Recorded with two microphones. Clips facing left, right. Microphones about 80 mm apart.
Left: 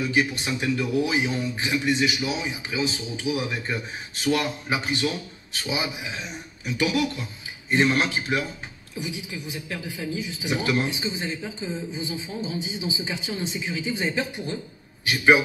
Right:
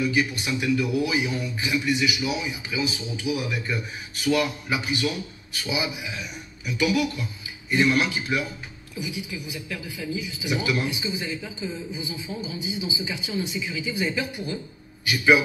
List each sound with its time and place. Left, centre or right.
0.0 s a man's voice: left